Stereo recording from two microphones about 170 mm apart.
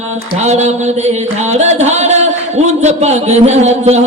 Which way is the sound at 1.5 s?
40° right (ahead or behind).